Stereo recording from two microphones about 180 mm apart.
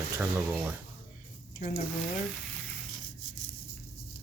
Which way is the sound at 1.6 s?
40° left (ahead or behind).